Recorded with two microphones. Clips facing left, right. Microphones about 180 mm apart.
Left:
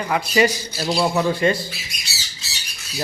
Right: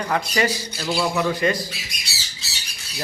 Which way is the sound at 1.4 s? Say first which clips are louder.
Left 3 dB; 30° left (ahead or behind).